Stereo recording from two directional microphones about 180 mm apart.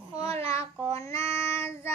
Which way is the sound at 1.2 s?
15° left (ahead or behind).